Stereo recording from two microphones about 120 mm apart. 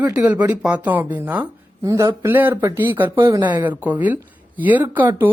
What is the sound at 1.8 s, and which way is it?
Speech, 30° right (ahead or behind).